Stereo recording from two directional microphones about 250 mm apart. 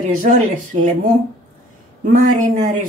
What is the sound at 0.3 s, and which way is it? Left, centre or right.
Speech, right.